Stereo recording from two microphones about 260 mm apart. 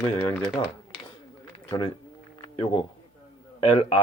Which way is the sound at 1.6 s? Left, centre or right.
Left.